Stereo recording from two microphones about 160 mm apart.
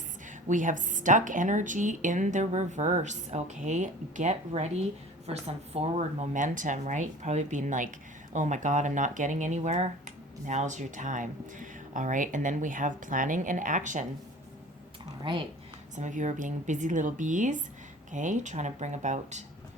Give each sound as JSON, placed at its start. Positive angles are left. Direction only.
{"t": 0.4, "sound": "a woman's voice", "side_deg": -55}
{"t": 6.3, "sound": "a woman's voice", "side_deg": -55}
{"t": 15.2, "sound": "speech", "side_deg": -30}
{"t": 16.0, "sound": "a woman's voice", "side_deg": -50}